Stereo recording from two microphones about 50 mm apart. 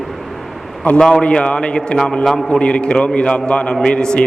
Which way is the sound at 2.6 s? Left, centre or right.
Left.